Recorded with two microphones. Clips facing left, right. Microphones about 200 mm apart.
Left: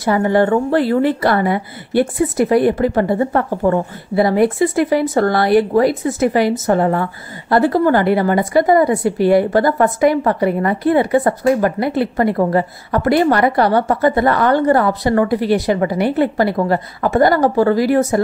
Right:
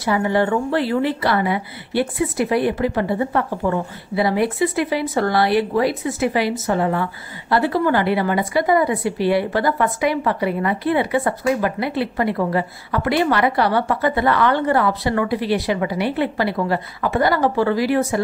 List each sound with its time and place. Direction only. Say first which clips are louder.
0.0 s speech: left 4 dB; 45° left (ahead or behind)